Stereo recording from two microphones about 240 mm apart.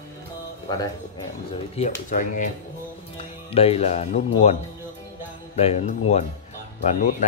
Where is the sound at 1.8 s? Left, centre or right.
Left.